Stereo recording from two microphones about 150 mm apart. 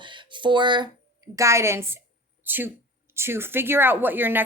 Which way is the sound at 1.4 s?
20° right (ahead or behind).